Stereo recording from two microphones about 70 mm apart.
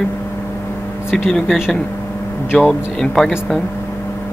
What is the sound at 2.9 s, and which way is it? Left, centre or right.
Speech, centre.